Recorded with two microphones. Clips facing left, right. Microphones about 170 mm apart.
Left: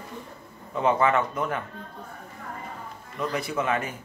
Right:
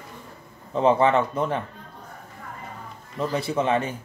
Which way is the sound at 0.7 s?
30° right (ahead or behind).